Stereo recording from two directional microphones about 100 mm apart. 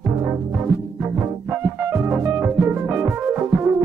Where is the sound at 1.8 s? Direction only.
25° right (ahead or behind).